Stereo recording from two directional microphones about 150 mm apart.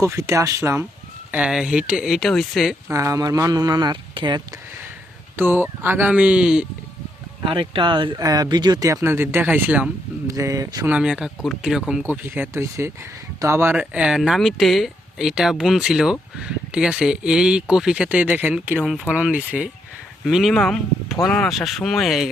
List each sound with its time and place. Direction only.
0.0 s speech: 20° right (ahead or behind)
1.3 s speech: 5° right (ahead or behind)
2.9 s speech: 20° right (ahead or behind)
5.4 s speech: 15° right (ahead or behind)
7.4 s speech: 35° right (ahead or behind); by 9.9 s 10° right (ahead or behind)
10.2 s speech: 20° right (ahead or behind)
10.8 s speech: 5° right (ahead or behind)
18.8 s speech: centre (ahead or behind)